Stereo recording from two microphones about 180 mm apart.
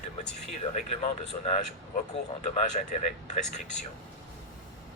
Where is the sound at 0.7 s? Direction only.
45° left (ahead or behind).